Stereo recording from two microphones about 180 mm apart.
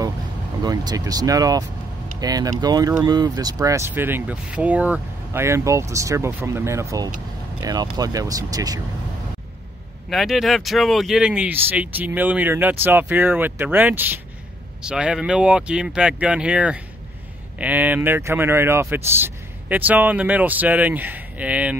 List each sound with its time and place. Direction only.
0.6 s speech: 20° right (ahead or behind)
10.0 s speech: centre (ahead or behind)